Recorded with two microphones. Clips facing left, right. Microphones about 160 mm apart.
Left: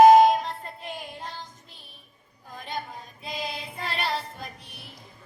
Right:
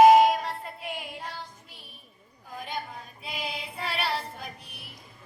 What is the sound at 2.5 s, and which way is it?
Chatter, 5° right (ahead or behind).